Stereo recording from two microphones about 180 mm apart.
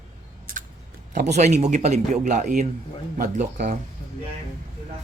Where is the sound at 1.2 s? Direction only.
40° right (ahead or behind).